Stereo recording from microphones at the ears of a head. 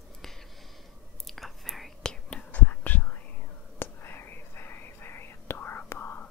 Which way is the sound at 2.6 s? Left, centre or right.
Left.